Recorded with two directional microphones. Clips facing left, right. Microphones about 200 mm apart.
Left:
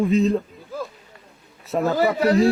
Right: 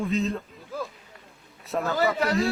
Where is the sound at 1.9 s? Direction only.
20° left (ahead or behind).